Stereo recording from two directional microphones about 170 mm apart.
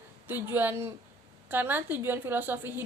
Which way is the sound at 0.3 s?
10° right (ahead or behind).